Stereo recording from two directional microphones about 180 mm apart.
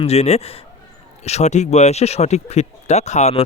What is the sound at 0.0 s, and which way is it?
Speech, 35° left (ahead or behind).